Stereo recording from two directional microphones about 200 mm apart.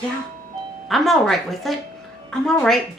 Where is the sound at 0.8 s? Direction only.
Centre (ahead or behind).